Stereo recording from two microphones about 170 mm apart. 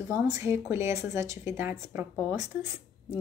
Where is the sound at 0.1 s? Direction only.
15° right (ahead or behind).